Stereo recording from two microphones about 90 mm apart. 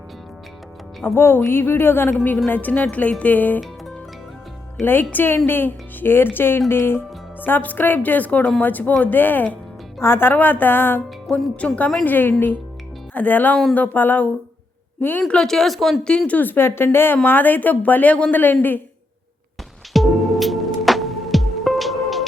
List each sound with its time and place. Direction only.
1.0 s a woman's voice: 25° left (ahead or behind)
4.8 s a woman's voice: 20° left (ahead or behind)
11.3 s a woman's voice: 10° left (ahead or behind)
15.3 s a woman's voice: 5° left (ahead or behind)
19.9 s music: centre (ahead or behind)